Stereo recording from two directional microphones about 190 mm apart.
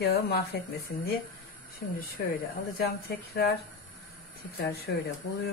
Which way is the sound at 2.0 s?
50° left (ahead or behind).